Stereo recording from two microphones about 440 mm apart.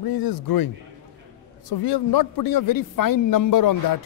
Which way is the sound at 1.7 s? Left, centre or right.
Left.